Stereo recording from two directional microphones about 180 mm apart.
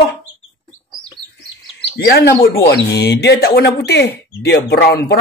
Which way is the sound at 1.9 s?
60° left (ahead or behind).